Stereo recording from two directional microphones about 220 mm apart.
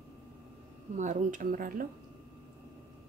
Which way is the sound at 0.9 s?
35° right (ahead or behind).